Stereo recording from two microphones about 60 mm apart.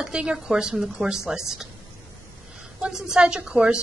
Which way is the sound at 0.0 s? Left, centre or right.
Centre.